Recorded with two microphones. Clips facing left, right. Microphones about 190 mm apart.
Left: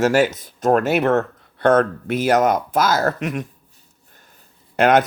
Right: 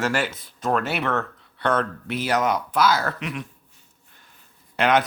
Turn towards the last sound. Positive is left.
turn(degrees=45)  # may be behind; listen again after turning